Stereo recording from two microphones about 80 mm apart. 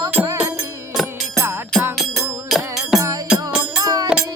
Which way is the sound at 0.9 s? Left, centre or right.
Centre.